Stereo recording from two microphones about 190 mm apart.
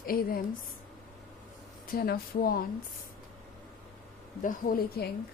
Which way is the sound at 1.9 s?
50° left (ahead or behind).